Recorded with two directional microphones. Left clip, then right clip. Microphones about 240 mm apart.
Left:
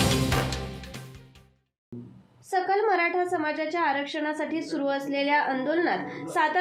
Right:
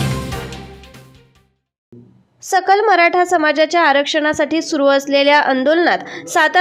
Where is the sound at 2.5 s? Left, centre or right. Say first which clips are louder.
Right 11 dB; right.